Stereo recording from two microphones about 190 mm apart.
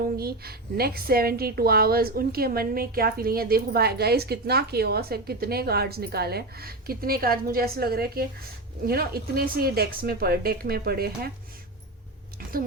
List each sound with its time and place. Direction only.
0.2 s a woman's voice: 55° right (ahead or behind)